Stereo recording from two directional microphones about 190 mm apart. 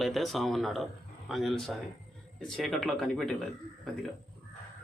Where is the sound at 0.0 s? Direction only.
Centre (ahead or behind).